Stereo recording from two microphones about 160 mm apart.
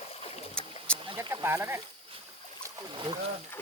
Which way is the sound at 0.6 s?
5° left (ahead or behind).